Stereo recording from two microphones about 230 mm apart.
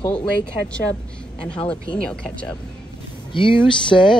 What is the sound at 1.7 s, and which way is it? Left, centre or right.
Speech, centre.